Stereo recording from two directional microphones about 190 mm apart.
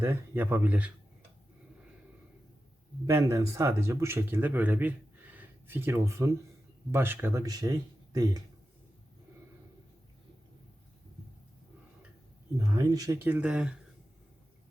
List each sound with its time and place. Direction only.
0.0 s speech: 10° right (ahead or behind)
3.1 s speech: 15° right (ahead or behind)
12.5 s speech: 20° right (ahead or behind)